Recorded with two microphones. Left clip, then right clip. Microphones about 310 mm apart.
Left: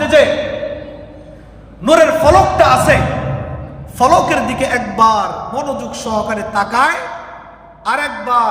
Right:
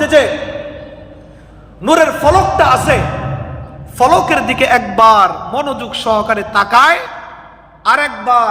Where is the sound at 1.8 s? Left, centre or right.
Right.